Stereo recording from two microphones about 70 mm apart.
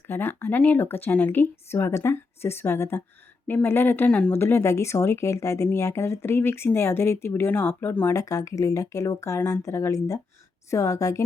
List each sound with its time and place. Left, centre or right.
0.1 s speech: left
8.1 s speech: left